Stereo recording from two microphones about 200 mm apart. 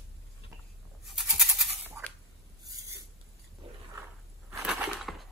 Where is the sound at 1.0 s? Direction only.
Centre (ahead or behind).